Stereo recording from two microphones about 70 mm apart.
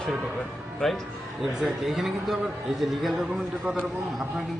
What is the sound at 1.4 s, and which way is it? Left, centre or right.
A man's voice, centre.